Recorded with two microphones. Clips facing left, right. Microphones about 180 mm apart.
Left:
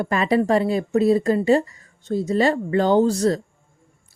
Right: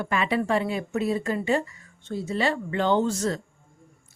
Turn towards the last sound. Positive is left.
turn(degrees=35)  # may be behind; listen again after turning